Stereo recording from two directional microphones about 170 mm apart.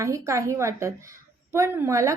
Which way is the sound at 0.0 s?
15° right (ahead or behind).